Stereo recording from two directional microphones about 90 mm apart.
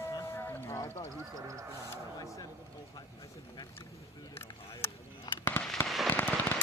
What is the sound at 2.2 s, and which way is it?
Speech, 40° left (ahead or behind).